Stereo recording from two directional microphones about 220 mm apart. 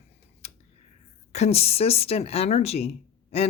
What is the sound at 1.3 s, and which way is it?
Speech, 30° left (ahead or behind).